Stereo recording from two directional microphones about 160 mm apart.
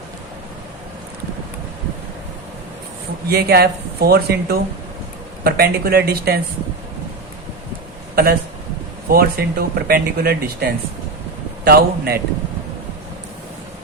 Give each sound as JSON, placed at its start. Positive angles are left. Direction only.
{"t": 3.2, "sound": "speech", "side_deg": -80}
{"t": 8.1, "sound": "a man's voice", "side_deg": -70}